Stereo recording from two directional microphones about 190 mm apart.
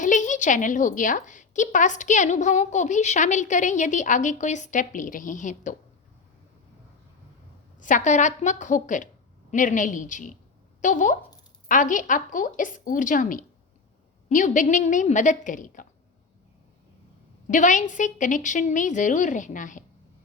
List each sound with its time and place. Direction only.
0.0 s a woman's voice: 40° left (ahead or behind)
7.8 s a woman's voice: 40° left (ahead or behind)
17.5 s a woman's voice: 40° left (ahead or behind)